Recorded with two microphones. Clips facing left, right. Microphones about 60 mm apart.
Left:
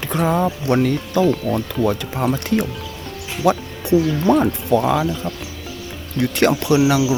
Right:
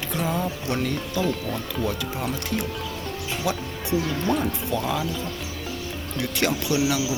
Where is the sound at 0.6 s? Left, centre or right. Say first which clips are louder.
Left 8 dB; left.